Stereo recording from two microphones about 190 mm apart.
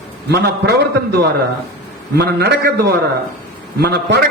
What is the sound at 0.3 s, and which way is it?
Speech, 60° right (ahead or behind).